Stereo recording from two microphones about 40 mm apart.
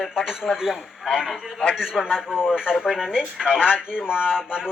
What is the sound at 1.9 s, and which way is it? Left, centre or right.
Speech, centre.